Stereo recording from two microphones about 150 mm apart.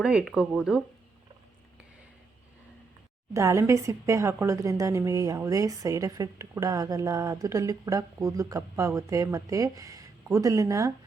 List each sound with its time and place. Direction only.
0.0 s speech: 5° right (ahead or behind)
3.3 s a woman's voice: 20° right (ahead or behind)